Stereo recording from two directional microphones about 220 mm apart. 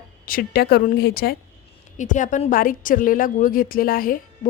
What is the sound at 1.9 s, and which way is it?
A woman's voice, 35° left (ahead or behind).